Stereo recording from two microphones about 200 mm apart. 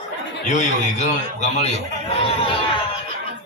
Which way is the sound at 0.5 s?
35° left (ahead or behind).